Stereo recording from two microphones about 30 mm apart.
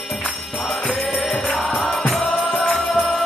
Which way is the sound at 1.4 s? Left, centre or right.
Centre.